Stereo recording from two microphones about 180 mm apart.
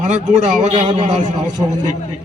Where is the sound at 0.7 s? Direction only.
25° right (ahead or behind).